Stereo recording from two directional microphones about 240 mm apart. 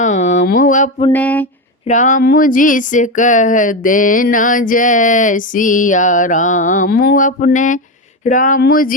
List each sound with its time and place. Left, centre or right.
0.0 s mantra: left
1.1 s a sound: centre
1.9 s speech: left